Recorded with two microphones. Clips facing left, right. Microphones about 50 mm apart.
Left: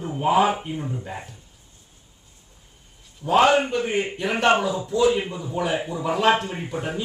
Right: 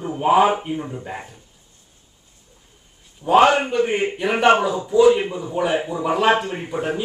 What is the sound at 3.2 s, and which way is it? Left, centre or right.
A man's voice, centre.